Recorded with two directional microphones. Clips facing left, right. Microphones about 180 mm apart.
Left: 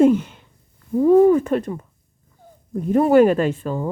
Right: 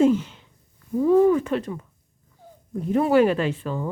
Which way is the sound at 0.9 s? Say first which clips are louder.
Left 4 dB; 45° left (ahead or behind).